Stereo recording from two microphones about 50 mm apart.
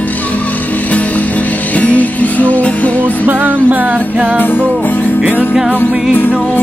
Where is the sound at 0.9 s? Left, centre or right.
Left.